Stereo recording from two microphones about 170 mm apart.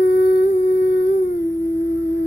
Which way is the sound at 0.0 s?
80° left.